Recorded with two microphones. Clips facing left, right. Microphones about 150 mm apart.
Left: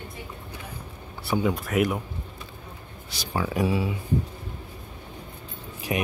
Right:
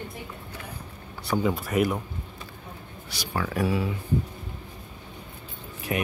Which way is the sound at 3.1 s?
15° left (ahead or behind).